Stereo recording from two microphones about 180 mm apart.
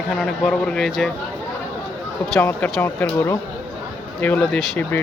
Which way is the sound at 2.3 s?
10° left (ahead or behind).